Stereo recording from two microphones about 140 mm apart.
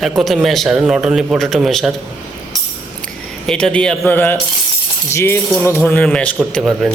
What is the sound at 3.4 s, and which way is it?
A man's voice, 5° left (ahead or behind).